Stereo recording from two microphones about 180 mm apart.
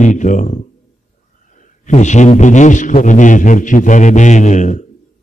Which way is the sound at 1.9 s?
40° left (ahead or behind).